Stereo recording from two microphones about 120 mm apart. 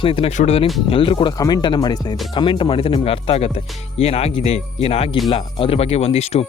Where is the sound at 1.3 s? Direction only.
35° left (ahead or behind).